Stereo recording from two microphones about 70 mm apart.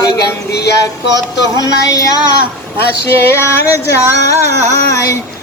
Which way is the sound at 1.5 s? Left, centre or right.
Left.